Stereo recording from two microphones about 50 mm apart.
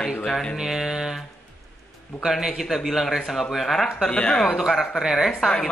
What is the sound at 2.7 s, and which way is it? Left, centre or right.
Speech, centre.